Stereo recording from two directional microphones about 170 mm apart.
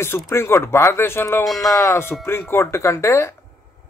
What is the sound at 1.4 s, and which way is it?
Speech, centre (ahead or behind).